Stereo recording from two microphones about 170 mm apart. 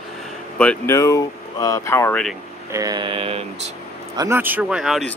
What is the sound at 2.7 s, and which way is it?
Speech, 20° right (ahead or behind).